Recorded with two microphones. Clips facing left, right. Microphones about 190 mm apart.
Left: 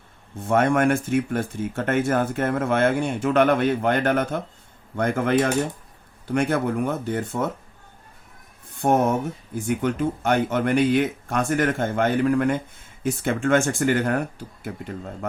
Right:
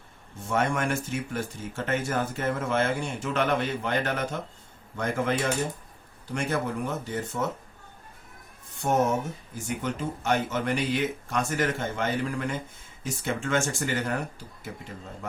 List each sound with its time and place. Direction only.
0.4 s speech: 55° left (ahead or behind)
8.8 s speech: 55° left (ahead or behind)